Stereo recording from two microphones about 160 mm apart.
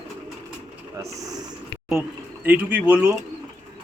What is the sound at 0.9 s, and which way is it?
Speech, 20° right (ahead or behind).